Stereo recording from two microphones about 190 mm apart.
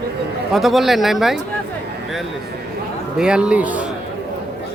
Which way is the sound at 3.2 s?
5° right (ahead or behind).